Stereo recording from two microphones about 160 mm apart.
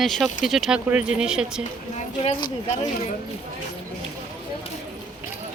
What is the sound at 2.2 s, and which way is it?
Speech, 35° left (ahead or behind).